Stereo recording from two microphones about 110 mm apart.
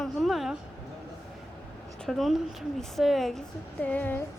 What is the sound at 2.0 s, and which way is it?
A woman's voice, centre (ahead or behind).